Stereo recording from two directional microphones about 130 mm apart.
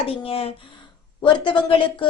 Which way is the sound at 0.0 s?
45° left (ahead or behind).